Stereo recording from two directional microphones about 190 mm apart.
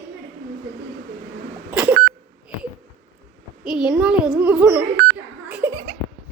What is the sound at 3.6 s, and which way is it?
A child's voice, 5° right (ahead or behind).